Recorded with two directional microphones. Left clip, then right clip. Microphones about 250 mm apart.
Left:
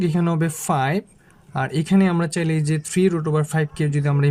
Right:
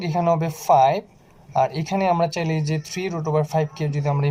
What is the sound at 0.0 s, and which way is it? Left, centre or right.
Speech, left.